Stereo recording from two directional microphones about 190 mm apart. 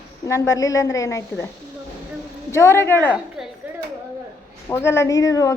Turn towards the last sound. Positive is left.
turn(degrees=15)  # may be behind; listen again after turning